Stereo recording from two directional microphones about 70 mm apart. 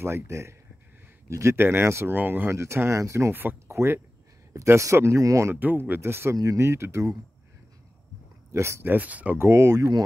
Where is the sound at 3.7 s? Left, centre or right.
Right.